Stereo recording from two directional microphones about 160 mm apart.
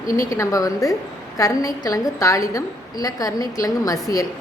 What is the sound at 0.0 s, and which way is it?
A woman's voice, 20° left (ahead or behind).